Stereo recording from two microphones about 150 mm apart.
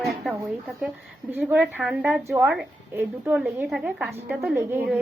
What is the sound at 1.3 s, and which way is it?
A woman's voice, 10° right (ahead or behind).